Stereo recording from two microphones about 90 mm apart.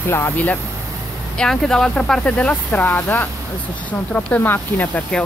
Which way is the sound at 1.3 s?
5° left (ahead or behind).